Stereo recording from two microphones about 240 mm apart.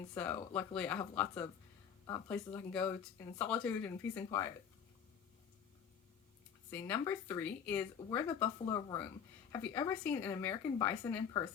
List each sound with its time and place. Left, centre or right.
0.1 s speech: centre
6.7 s speech: centre